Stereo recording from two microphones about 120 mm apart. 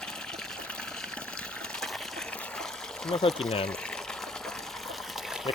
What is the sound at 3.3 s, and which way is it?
Speech, 5° left (ahead or behind).